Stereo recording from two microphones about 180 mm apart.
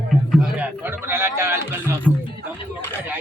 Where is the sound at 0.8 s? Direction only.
10° right (ahead or behind).